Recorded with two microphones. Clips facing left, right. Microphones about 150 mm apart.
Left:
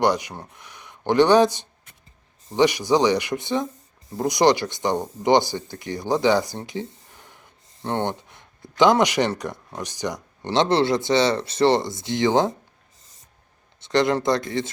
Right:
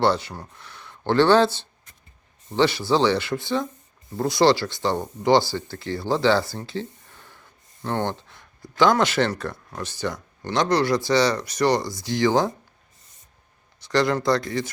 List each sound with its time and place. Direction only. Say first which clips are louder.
0.0 s speech: even; 15° left (ahead or behind)
13.7 s speech: left 1 dB; 25° left (ahead or behind)